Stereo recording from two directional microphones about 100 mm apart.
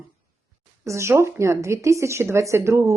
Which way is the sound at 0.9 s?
30° right (ahead or behind).